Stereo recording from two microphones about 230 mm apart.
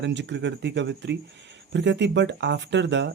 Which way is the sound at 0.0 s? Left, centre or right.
Right.